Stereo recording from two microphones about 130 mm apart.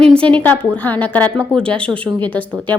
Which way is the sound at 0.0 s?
5° left (ahead or behind).